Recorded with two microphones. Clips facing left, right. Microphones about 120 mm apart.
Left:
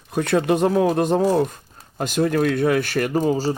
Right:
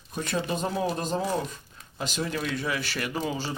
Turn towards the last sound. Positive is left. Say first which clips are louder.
# left 10 dB
turn(degrees=40)  # may be behind; listen again after turning